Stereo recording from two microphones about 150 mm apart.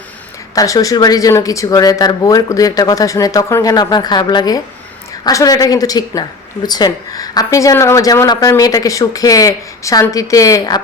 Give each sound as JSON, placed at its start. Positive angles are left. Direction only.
{"t": 0.5, "sound": "speech", "side_deg": 25}